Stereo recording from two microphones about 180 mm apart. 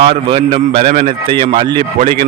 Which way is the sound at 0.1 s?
30° right (ahead or behind).